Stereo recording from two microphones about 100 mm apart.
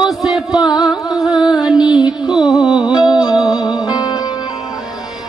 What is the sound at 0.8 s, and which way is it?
Music, 5° right (ahead or behind).